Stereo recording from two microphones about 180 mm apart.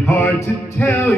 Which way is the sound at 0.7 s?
15° left (ahead or behind).